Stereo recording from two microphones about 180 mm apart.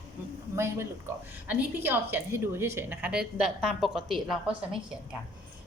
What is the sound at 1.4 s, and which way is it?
A woman's voice, 10° right (ahead or behind).